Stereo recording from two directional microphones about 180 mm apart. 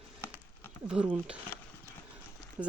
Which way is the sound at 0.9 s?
10° right (ahead or behind).